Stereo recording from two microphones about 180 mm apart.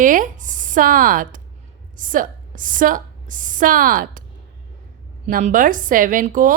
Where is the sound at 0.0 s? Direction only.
45° right (ahead or behind).